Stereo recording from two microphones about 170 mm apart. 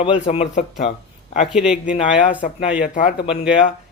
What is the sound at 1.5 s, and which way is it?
Speech, 5° right (ahead or behind).